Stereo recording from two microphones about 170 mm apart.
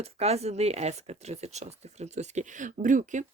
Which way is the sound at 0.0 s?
40° right (ahead or behind).